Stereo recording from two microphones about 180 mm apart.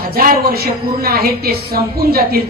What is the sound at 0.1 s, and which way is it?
A woman's voice, 60° right (ahead or behind).